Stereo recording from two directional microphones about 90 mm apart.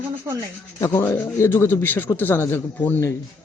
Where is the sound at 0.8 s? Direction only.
30° left (ahead or behind).